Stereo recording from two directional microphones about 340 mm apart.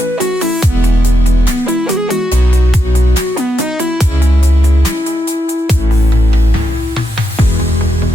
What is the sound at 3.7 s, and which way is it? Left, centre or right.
Music, centre.